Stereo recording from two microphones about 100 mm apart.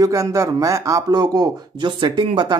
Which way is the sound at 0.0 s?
35° right (ahead or behind).